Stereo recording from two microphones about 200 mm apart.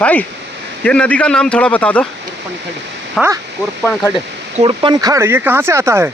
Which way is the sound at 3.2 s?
Centre (ahead or behind).